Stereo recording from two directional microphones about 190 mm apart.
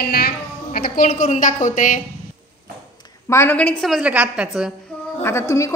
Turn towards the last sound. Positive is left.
turn(degrees=15)  # may be behind; listen again after turning